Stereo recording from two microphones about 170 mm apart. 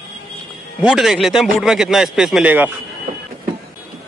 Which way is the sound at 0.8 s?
5° right (ahead or behind).